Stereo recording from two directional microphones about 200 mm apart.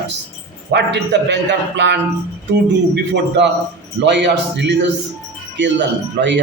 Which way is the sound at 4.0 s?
60° right (ahead or behind).